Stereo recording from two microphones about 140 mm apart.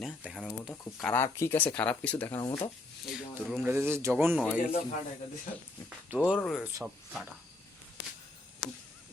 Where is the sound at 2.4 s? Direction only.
25° left (ahead or behind).